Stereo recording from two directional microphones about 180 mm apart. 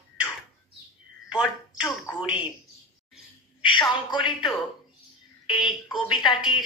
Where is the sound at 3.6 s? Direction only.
25° left (ahead or behind).